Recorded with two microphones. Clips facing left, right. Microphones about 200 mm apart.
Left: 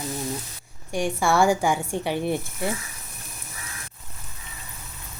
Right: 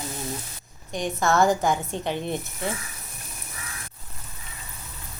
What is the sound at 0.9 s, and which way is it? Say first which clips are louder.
A woman's voice: left 1 dB; 10° left (ahead or behind).